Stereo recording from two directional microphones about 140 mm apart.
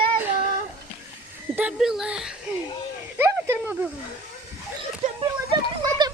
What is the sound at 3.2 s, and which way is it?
Speech, 15° right (ahead or behind).